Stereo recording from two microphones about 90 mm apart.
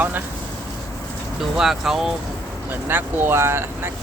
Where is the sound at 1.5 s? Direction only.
5° right (ahead or behind).